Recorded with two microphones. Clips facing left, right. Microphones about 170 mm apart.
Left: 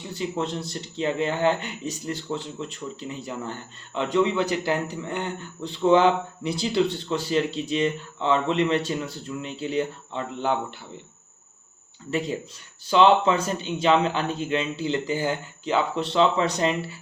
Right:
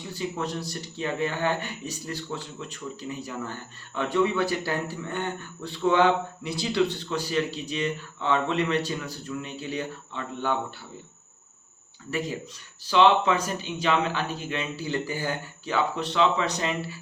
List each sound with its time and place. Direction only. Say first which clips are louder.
0.2 s speech: left 3 dB; 25° left (ahead or behind)
12.9 s speech: left 2 dB; 30° left (ahead or behind)